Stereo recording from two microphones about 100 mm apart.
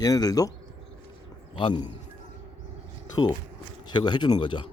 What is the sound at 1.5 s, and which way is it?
Speech, 50° left (ahead or behind).